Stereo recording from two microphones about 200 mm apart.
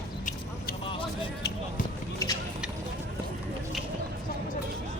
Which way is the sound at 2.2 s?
15° left (ahead or behind).